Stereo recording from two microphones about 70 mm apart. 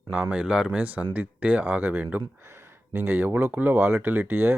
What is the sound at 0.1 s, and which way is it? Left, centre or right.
Speech, centre.